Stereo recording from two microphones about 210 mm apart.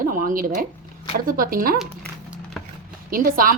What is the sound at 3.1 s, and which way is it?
Speech, 40° right (ahead or behind).